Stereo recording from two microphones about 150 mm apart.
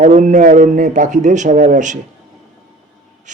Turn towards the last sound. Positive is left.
turn(degrees=-55)  # may be behind; listen again after turning